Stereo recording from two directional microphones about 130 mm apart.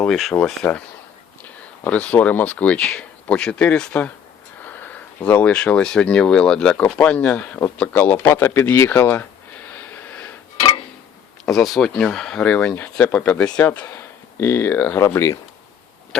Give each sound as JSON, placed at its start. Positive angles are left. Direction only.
{"t": 0.0, "sound": "speech", "side_deg": 0}
{"t": 9.6, "sound": "a sound", "side_deg": 15}
{"t": 11.4, "sound": "speech", "side_deg": 0}